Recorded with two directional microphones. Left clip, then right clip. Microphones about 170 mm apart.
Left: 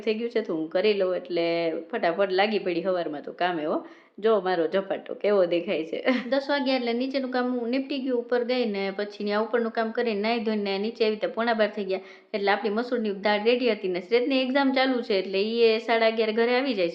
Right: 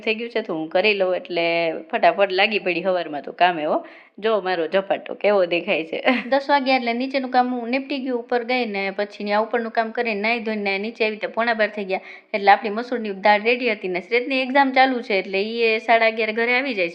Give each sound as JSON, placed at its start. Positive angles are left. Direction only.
{"t": 0.0, "sound": "a woman's voice", "side_deg": -15}